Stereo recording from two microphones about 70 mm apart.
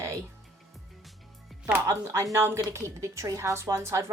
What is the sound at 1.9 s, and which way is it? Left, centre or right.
A woman's voice, right.